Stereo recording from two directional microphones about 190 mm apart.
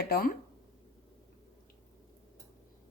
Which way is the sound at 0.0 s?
50° left (ahead or behind).